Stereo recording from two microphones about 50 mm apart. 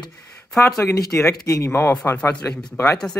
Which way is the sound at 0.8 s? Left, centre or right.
Left.